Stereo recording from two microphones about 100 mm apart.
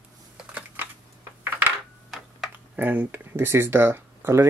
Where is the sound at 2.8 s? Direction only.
20° right (ahead or behind).